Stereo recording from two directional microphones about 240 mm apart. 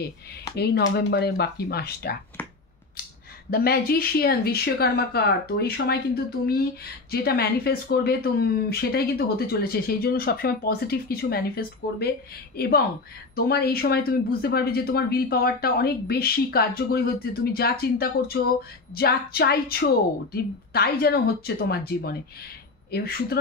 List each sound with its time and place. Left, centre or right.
0.6 s speech: left
3.4 s speech: left